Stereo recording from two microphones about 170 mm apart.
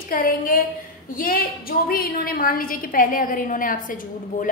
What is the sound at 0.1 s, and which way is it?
A woman's voice, 55° left (ahead or behind).